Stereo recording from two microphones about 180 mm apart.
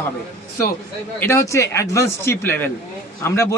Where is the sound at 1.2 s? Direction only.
15° left (ahead or behind).